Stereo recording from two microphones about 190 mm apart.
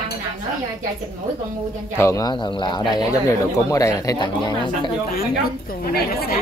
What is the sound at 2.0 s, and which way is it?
Speech, 15° left (ahead or behind).